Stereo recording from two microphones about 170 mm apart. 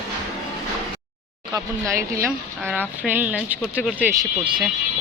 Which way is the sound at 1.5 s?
15° right (ahead or behind).